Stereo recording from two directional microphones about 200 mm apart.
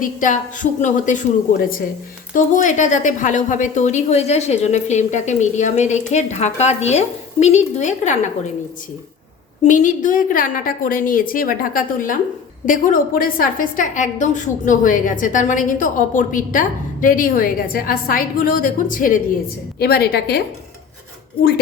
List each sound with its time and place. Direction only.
0.0 s a woman's voice: 40° left (ahead or behind)
9.6 s a woman's voice: 40° left (ahead or behind)